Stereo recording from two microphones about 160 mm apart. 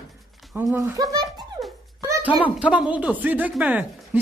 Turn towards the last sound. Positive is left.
turn(degrees=-10)  # may be behind; listen again after turning